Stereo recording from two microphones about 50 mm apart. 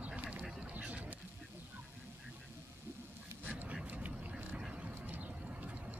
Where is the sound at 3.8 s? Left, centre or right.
Right.